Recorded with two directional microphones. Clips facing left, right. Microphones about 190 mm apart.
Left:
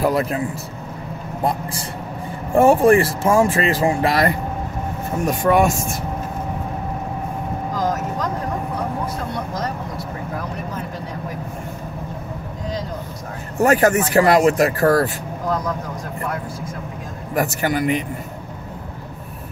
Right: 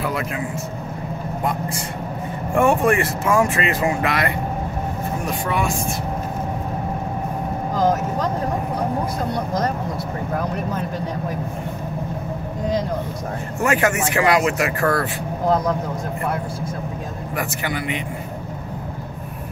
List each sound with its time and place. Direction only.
0.0 s speech: 40° left (ahead or behind)
2.5 s speech: 35° left (ahead or behind)
13.6 s speech: 40° left (ahead or behind)
17.4 s speech: 40° left (ahead or behind)